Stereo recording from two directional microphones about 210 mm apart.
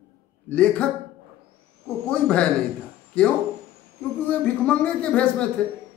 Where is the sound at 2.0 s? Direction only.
5° left (ahead or behind).